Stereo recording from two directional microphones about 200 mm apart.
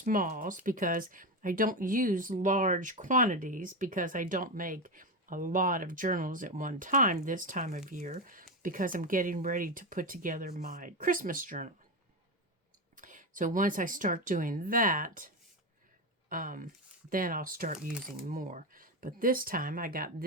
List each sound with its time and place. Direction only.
0.0 s speech: 45° right (ahead or behind)
13.0 s speech: 40° right (ahead or behind)
16.3 s speech: 45° right (ahead or behind)